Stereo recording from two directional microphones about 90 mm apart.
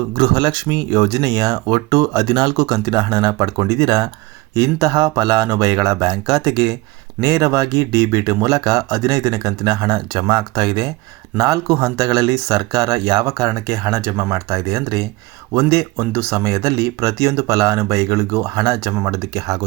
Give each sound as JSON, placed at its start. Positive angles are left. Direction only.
{"t": 0.1, "sound": "speech", "side_deg": -55}
{"t": 14.3, "sound": "speech", "side_deg": -40}